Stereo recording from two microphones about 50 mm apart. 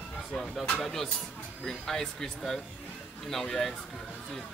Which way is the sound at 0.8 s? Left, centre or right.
Centre.